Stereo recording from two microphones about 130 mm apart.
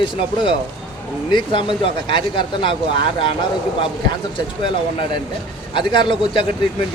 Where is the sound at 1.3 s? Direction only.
40° left (ahead or behind).